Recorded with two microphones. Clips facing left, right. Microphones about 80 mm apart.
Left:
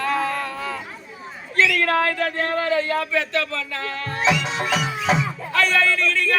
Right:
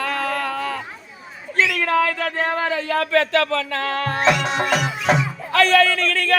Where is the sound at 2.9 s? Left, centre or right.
Right.